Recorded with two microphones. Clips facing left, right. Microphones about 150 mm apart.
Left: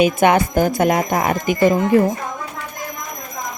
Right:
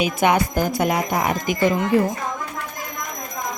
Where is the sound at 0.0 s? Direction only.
50° left (ahead or behind).